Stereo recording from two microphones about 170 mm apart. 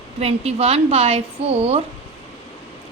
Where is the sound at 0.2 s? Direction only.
35° right (ahead or behind).